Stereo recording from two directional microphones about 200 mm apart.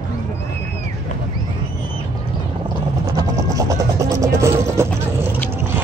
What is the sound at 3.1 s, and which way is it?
Vehicle, 20° right (ahead or behind).